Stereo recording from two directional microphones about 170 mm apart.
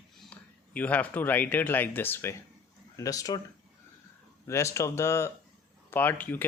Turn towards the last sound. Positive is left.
turn(degrees=10)  # may be behind; listen again after turning